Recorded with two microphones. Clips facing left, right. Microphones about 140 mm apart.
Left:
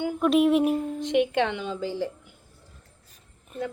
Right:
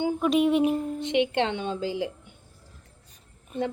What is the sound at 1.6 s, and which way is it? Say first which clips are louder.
Speech: right 1 dB; 15° right (ahead or behind).